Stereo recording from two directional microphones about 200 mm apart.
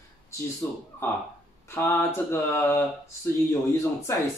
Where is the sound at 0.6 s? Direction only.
10° left (ahead or behind).